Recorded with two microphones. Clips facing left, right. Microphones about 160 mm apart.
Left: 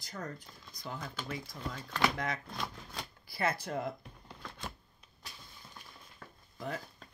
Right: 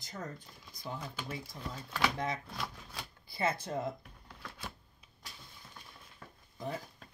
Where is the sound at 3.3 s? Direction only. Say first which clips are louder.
Even; 25° right (ahead or behind).